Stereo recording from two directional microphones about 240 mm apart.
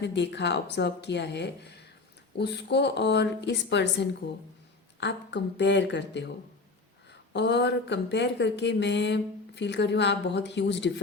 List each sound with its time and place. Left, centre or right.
0.0 s speech: left
7.3 s speech: left